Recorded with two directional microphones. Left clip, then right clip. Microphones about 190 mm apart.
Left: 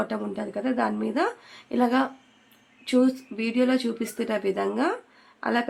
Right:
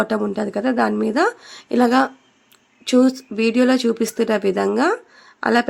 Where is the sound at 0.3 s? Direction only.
40° right (ahead or behind).